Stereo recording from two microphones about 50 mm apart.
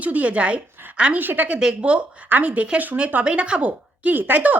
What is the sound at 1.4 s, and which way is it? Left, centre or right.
A woman's voice, right.